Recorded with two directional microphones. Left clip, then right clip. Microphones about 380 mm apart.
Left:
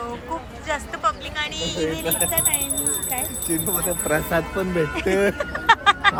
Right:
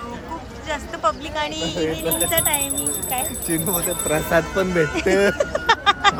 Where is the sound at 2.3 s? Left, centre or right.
Centre.